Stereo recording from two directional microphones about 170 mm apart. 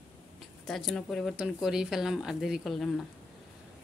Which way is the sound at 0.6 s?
5° left (ahead or behind).